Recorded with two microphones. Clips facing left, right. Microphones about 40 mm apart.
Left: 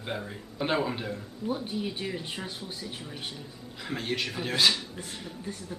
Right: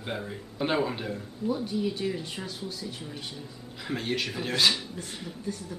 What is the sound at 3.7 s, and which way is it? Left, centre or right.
Speech, centre.